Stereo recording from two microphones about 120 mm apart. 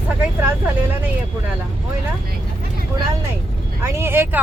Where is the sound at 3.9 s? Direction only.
20° right (ahead or behind).